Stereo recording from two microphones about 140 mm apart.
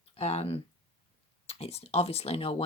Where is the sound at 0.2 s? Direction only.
45° left (ahead or behind).